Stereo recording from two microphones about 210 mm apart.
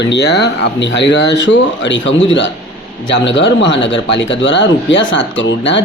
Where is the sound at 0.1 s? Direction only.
55° left (ahead or behind).